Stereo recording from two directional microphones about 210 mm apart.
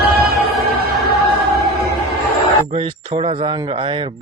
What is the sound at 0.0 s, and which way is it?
Music, 50° right (ahead or behind).